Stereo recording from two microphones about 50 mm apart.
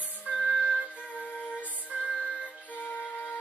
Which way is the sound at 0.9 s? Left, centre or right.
Left.